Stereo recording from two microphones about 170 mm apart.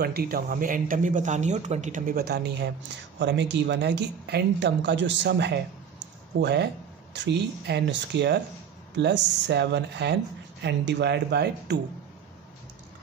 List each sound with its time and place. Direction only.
0.0 s speech: 65° right (ahead or behind)